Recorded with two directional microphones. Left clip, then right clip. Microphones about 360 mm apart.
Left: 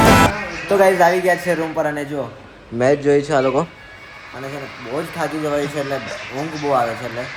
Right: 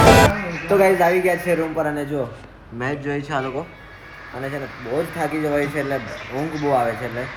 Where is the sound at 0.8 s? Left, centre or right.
Left.